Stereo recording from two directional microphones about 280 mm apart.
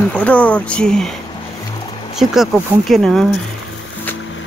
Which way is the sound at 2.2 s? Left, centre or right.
Centre.